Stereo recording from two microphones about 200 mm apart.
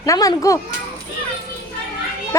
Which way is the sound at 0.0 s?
15° left (ahead or behind).